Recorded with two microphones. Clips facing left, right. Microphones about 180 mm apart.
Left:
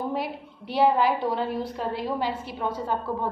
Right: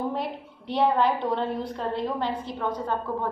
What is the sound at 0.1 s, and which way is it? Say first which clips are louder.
A woman's voice: left 1 dB; 5° left (ahead or behind).